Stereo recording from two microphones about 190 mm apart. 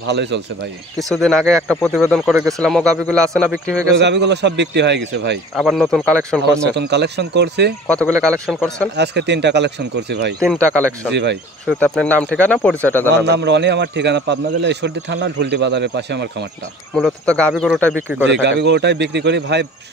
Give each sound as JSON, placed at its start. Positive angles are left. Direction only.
{"t": 0.1, "sound": "a man's voice", "side_deg": -65}
{"t": 0.9, "sound": "speech", "side_deg": 0}
{"t": 3.9, "sound": "a man's voice", "side_deg": -65}
{"t": 5.6, "sound": "speech", "side_deg": 0}
{"t": 6.8, "sound": "a man's voice", "side_deg": -65}
{"t": 7.9, "sound": "speech", "side_deg": 5}
{"t": 8.9, "sound": "a man's voice", "side_deg": -65}
{"t": 11.6, "sound": "speech", "side_deg": 5}
{"t": 13.1, "sound": "a man's voice", "side_deg": -65}
{"t": 16.9, "sound": "speech", "side_deg": 5}
{"t": 18.3, "sound": "a man's voice", "side_deg": -65}